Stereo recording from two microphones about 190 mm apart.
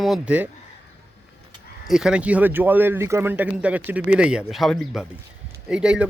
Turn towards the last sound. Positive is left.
turn(degrees=-5)  # may be behind; listen again after turning